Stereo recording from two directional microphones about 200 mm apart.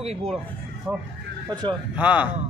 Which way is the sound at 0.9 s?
10° right (ahead or behind).